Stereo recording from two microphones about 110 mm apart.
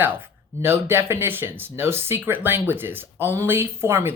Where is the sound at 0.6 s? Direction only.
20° right (ahead or behind).